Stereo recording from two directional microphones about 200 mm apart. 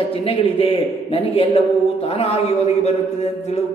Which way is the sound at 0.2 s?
30° left (ahead or behind).